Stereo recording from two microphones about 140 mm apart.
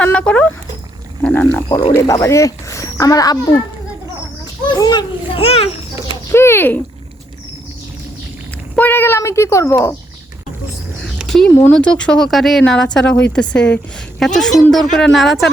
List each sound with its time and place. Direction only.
0.0 s dog: 10° left (ahead or behind)
1.2 s wild animals: 15° left (ahead or behind)
2.0 s speech: 20° left (ahead or behind)
4.7 s children playing: 30° left (ahead or behind)
6.3 s a sound: 15° left (ahead or behind)
8.7 s speech: 15° left (ahead or behind)
11.0 s a sound: centre (ahead or behind)
11.7 s speech: 5° left (ahead or behind)